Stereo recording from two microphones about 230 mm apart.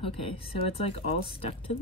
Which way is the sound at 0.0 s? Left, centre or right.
Left.